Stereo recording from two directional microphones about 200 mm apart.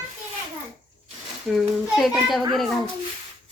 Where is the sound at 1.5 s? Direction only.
Centre (ahead or behind).